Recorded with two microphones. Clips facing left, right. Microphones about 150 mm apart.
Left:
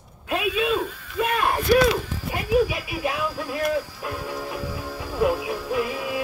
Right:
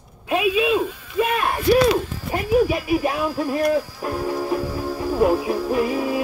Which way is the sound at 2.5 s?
45° right (ahead or behind).